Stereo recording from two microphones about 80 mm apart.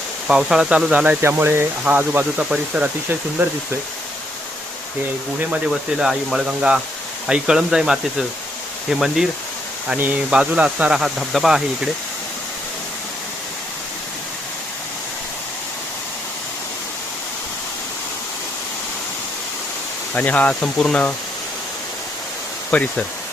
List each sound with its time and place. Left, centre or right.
0.3 s speech: centre
0.9 s speech: centre
1.2 s speech: right
2.5 s speech: centre
3.4 s speech: right
6.0 s speech: centre
10.3 s speech: centre
10.9 s speech: centre
20.1 s speech: centre
22.7 s speech: centre